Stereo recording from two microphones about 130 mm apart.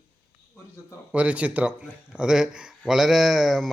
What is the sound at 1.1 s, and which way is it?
A man's voice, 10° right (ahead or behind).